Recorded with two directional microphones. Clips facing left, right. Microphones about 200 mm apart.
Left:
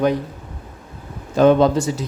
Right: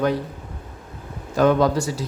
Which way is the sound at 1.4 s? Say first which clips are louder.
Left 4 dB; 25° left (ahead or behind).